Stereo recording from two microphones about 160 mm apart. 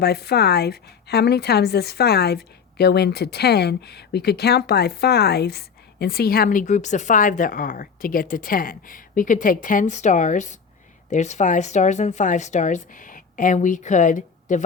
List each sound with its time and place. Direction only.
0.0 s a woman's voice: 90° left; by 14.3 s 50° left (ahead or behind)